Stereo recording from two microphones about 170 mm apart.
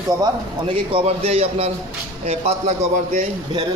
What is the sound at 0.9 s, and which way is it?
A man's voice, 35° right (ahead or behind).